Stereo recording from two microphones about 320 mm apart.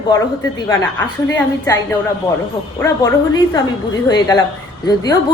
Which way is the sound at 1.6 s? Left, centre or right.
Centre.